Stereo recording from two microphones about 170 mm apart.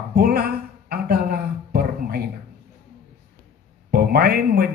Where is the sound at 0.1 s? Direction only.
65° right (ahead or behind).